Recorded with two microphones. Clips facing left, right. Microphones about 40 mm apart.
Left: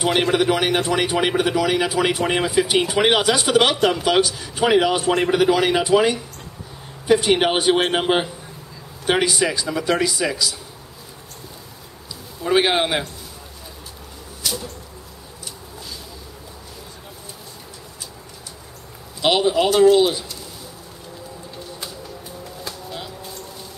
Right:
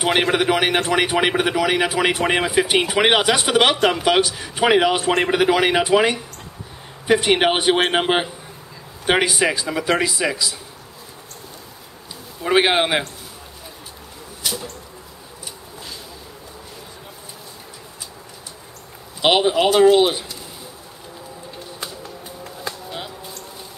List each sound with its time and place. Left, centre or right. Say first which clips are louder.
0.0 s a man's voice: even; centre
12.4 s a man's voice: right 1 dB; centre
14.4 s a sound: even; centre
19.2 s a man's voice: right 1 dB; right
22.7 s music: right 3 dB; centre